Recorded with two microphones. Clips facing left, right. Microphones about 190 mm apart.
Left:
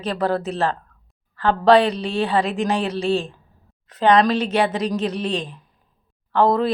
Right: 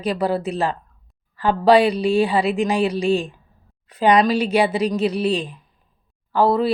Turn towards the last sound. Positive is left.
turn(degrees=-5)  # may be behind; listen again after turning